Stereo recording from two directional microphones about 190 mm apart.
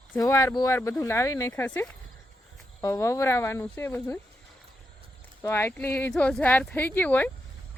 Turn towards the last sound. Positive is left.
turn(degrees=10)  # may be behind; listen again after turning